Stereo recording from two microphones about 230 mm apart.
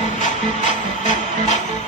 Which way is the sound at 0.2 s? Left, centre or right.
Left.